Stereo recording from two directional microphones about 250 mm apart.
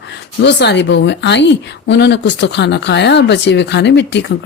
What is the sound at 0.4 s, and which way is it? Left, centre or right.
Speech, left.